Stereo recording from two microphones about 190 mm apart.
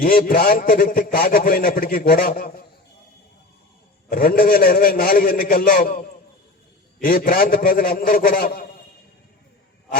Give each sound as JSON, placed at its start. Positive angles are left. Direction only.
{"t": 0.0, "sound": "a man's voice", "side_deg": 50}
{"t": 4.1, "sound": "a man's voice", "side_deg": 50}